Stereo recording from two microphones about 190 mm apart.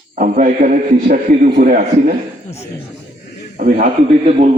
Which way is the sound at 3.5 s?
40° right (ahead or behind).